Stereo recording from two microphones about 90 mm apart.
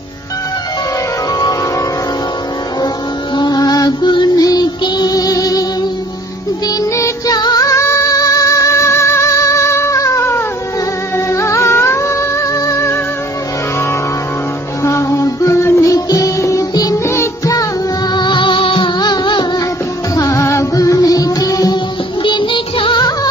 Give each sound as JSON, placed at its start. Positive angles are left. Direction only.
{"t": 3.3, "sound": "music", "side_deg": 50}
{"t": 7.0, "sound": "music", "side_deg": 45}
{"t": 14.8, "sound": "music", "side_deg": 35}
{"t": 17.0, "sound": "music", "side_deg": 30}
{"t": 18.1, "sound": "music", "side_deg": 55}
{"t": 18.9, "sound": "music", "side_deg": 55}
{"t": 20.2, "sound": "music", "side_deg": 35}
{"t": 22.2, "sound": "music", "side_deg": 65}